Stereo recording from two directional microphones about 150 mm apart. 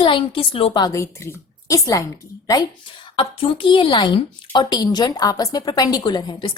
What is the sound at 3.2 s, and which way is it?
A woman's voice, 35° left (ahead or behind).